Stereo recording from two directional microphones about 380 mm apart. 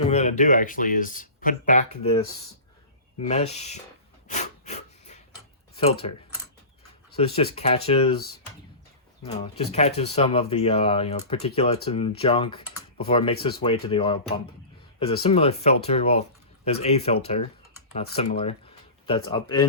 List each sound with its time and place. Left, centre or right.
0.0 s speech: centre
4.3 s snort: centre
5.7 s speech: centre
7.2 s speech: centre